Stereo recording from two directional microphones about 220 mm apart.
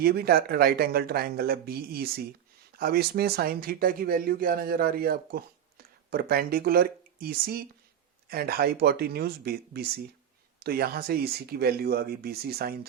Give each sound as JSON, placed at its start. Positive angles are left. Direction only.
{"t": 0.0, "sound": "speech", "side_deg": -45}